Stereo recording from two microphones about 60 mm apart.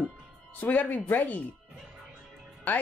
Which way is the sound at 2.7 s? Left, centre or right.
Left.